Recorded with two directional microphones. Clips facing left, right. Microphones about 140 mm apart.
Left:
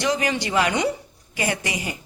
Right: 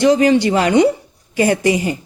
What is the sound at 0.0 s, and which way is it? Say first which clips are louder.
Speech: right 11 dB; 30° right (ahead or behind).